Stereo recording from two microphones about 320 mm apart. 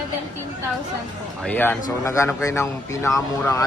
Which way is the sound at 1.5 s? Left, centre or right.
Centre.